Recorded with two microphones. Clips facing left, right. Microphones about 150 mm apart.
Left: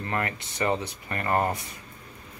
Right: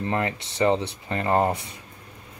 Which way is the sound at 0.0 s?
20° right (ahead or behind).